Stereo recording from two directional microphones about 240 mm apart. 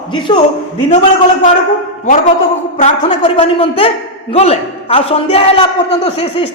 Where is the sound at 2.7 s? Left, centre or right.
Left.